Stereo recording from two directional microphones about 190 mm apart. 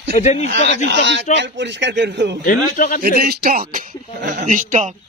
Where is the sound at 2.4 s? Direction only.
45° left (ahead or behind).